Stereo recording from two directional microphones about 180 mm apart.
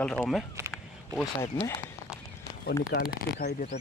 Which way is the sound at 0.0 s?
5° left (ahead or behind).